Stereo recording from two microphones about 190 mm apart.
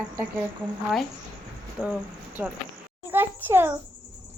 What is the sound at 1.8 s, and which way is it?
Speech, 5° right (ahead or behind).